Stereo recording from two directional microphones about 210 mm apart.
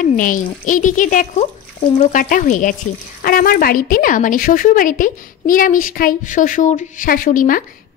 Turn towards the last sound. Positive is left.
turn(degrees=40)  # may be behind; listen again after turning